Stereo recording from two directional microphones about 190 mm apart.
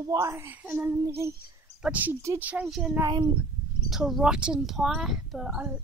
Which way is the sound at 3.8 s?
Centre (ahead or behind).